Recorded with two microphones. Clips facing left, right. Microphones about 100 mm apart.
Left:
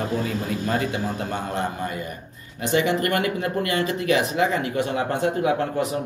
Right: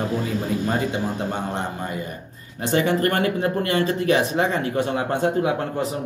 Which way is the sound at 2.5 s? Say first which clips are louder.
Right 1 dB; 35° right (ahead or behind).